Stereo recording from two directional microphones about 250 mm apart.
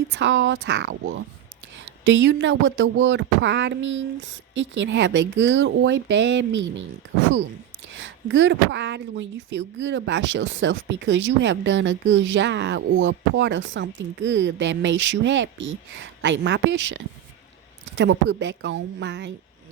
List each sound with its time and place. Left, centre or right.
0.1 s speech: right
7.9 s speech: right